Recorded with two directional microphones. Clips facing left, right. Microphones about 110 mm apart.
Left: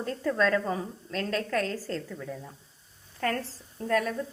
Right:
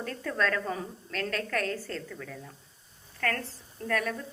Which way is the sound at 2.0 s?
15° left (ahead or behind).